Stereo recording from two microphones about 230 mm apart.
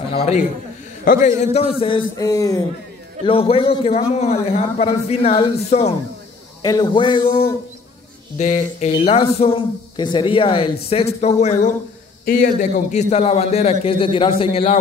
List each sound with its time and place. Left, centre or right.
1.0 s a man's voice: left